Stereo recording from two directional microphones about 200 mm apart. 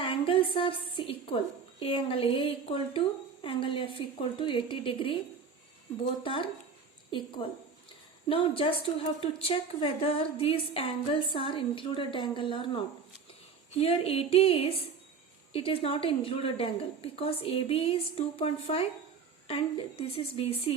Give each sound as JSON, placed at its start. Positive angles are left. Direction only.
{"t": 0.0, "sound": "a sound", "side_deg": 25}
{"t": 1.8, "sound": "a woman's voice", "side_deg": 30}
{"t": 6.2, "sound": "a woman's voice", "side_deg": 25}